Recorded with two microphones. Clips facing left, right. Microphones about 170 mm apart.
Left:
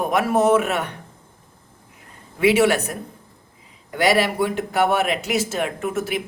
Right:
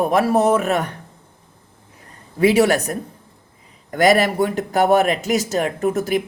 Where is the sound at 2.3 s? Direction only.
40° right (ahead or behind).